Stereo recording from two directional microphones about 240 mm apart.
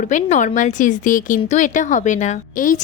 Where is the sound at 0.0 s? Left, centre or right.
Left.